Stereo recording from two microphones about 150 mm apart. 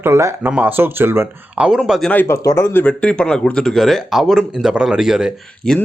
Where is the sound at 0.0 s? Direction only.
20° right (ahead or behind); by 2.1 s 5° left (ahead or behind).